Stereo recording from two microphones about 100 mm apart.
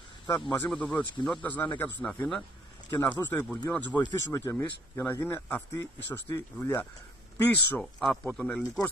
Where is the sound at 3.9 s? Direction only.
30° left (ahead or behind).